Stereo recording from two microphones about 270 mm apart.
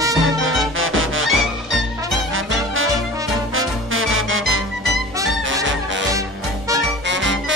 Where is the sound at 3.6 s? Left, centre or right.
Right.